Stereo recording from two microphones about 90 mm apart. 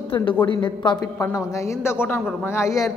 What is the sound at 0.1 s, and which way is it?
Speech, 65° left (ahead or behind).